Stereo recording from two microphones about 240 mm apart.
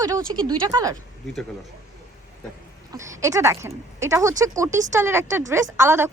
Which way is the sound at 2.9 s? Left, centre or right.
Centre.